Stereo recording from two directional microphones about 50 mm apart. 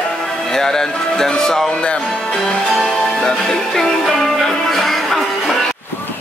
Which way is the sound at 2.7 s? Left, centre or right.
Centre.